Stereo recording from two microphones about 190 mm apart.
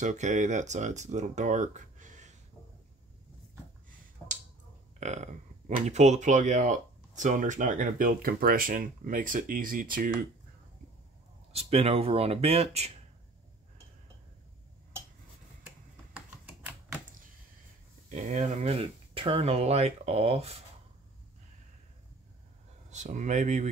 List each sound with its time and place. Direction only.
0.0 s speech: 40° right (ahead or behind)
5.0 s speech: 40° right (ahead or behind)
11.5 s speech: 30° right (ahead or behind)
16.1 s typing: 5° right (ahead or behind)
18.1 s speech: 40° right (ahead or behind)
22.8 s speech: 40° right (ahead or behind)